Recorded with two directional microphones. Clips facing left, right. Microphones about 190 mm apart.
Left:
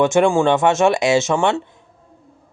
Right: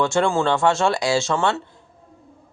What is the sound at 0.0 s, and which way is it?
Speech, 20° left (ahead or behind).